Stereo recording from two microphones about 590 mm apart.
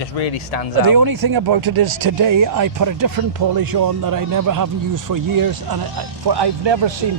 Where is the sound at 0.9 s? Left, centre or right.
Right.